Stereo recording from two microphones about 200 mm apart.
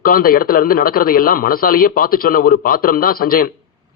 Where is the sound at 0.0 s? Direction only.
45° left (ahead or behind).